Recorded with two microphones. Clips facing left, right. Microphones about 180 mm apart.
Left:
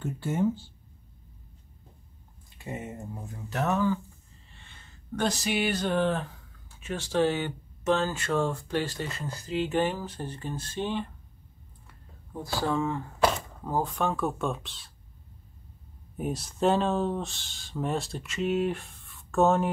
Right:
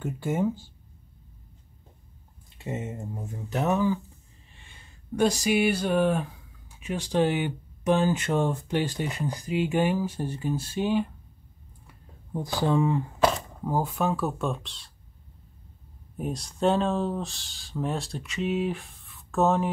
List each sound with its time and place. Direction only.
0.0 s speech: 15° right (ahead or behind)
2.6 s speech: 25° right (ahead or behind)
12.3 s speech: 15° right (ahead or behind); by 14.9 s centre (ahead or behind)
16.2 s speech: 5° left (ahead or behind)